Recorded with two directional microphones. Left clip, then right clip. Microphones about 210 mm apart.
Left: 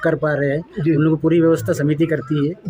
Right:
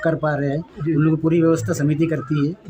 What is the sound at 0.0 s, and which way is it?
Speech, 20° left (ahead or behind).